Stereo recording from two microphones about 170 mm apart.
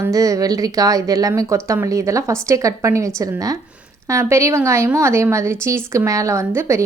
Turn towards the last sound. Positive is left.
turn(degrees=-15)  # may be behind; listen again after turning